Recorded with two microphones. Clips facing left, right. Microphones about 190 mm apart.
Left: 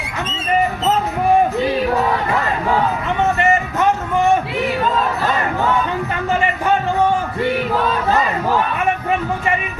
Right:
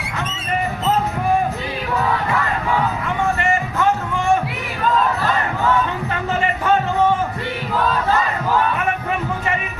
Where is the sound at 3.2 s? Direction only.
20° left (ahead or behind).